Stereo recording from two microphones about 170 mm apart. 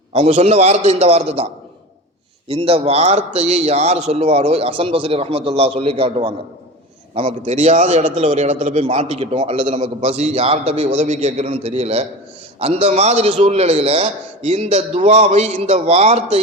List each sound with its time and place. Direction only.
0.1 s a man's voice: 35° right (ahead or behind)
2.5 s a man's voice: 35° right (ahead or behind)